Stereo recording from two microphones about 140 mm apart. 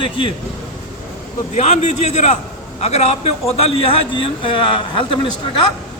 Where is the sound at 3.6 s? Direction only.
40° left (ahead or behind).